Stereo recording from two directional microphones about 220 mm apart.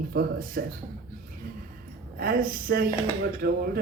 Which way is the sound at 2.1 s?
40° right (ahead or behind).